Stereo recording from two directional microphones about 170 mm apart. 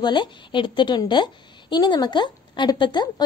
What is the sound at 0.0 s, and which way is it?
A woman's voice, 25° left (ahead or behind).